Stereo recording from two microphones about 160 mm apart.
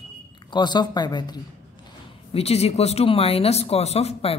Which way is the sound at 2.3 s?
40° left (ahead or behind).